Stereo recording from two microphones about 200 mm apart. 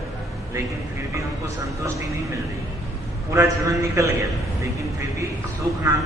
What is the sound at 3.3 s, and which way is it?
Speech, 15° right (ahead or behind).